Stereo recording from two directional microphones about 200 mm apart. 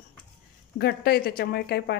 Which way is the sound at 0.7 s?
50° left (ahead or behind).